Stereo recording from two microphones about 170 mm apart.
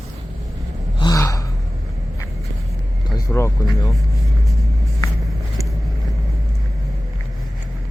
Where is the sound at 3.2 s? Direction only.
15° left (ahead or behind).